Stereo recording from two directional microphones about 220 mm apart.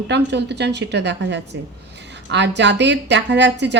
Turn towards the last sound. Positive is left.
turn(degrees=-50)  # may be behind; listen again after turning